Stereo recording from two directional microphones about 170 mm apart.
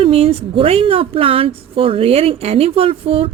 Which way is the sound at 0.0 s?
35° right (ahead or behind).